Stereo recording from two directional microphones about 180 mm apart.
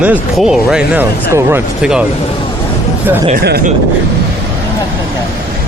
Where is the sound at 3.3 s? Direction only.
55° right (ahead or behind).